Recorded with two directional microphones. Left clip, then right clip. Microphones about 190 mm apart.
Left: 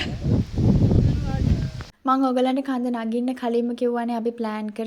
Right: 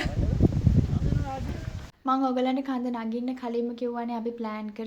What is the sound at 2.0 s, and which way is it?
A woman's voice, 30° left (ahead or behind).